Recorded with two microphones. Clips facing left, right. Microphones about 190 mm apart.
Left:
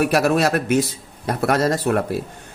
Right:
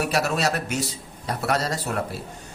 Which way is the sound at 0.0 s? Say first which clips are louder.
Left 6 dB; 55° left (ahead or behind).